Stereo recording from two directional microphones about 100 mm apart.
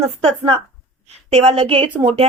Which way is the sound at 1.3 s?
90° right.